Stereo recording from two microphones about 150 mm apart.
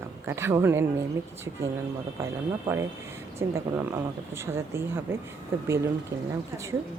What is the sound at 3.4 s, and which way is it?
Speech, 15° right (ahead or behind).